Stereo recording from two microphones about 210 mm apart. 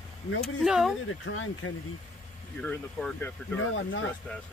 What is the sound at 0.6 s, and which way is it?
Speech, centre (ahead or behind).